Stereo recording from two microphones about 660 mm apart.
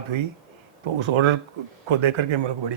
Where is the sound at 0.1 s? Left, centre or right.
Right.